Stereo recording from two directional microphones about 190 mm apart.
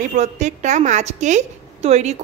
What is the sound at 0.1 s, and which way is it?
A woman's voice, 40° right (ahead or behind).